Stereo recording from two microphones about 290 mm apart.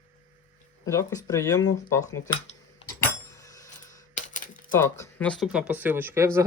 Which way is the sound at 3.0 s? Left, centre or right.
Centre.